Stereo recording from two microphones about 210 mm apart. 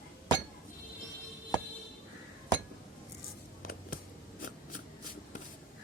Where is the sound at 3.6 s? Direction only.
45° left (ahead or behind).